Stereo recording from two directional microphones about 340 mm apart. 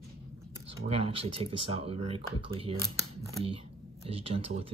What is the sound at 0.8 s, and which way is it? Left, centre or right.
Speech, centre.